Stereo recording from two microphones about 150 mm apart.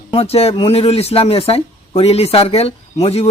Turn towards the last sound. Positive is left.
turn(degrees=45)  # may be behind; listen again after turning